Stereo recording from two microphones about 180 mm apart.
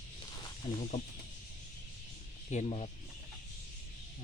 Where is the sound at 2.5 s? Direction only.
40° left (ahead or behind).